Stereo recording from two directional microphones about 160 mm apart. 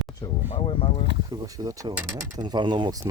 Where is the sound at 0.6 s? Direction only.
35° left (ahead or behind).